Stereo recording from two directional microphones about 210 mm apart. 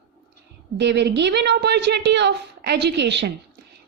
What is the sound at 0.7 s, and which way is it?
A woman's voice, 55° right (ahead or behind).